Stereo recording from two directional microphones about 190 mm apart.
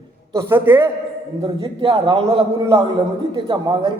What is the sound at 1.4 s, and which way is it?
A man's voice, 25° right (ahead or behind).